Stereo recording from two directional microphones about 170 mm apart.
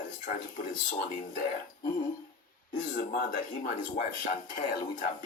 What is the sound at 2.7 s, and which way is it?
Speech, 50° left (ahead or behind).